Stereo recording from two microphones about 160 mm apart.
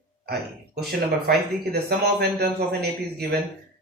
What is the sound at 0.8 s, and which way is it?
Speech, 80° right.